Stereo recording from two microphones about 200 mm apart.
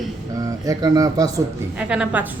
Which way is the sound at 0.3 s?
15° right (ahead or behind).